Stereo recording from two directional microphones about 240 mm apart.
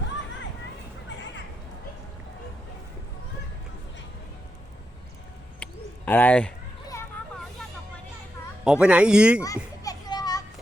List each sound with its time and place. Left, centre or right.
5.6 s bird: centre
6.1 s speech: centre
8.6 s speech: centre
9.8 s children playing: centre